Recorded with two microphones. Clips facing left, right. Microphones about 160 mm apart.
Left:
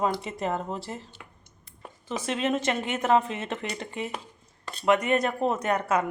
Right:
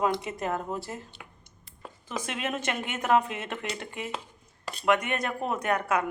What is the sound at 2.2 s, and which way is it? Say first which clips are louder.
Speech: left 6 dB; 10° right (ahead or behind).